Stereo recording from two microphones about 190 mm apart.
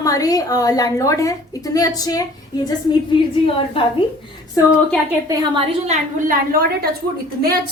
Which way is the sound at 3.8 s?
30° left (ahead or behind).